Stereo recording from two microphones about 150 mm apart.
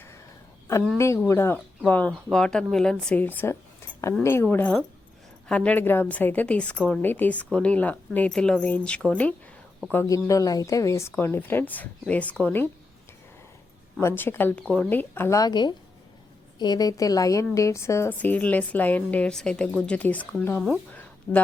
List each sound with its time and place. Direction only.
0.9 s a woman's voice: 20° left (ahead or behind)
14.0 s a woman's voice: 15° left (ahead or behind)
14.6 s speech: centre (ahead or behind)
14.8 s a woman's voice: 10° left (ahead or behind)
20.9 s a sound: 10° left (ahead or behind)